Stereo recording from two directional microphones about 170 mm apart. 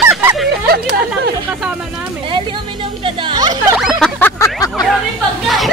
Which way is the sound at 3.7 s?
5° right (ahead or behind).